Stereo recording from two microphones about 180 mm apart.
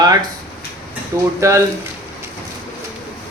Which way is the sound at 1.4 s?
15° right (ahead or behind).